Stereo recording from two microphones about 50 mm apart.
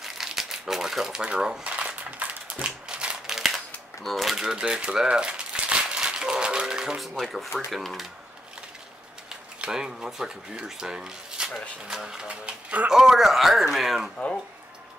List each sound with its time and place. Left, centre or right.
0.0 s speech: centre
1.7 s a sound: right
2.5 s a sound: centre
3.3 s a sound: centre
4.4 s speech: centre
5.0 s crumpling: centre
7.0 s speech: centre
9.7 s speech: centre
12.8 s speech: centre